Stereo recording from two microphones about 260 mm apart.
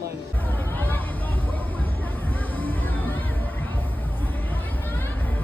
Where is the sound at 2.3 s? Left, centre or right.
Centre.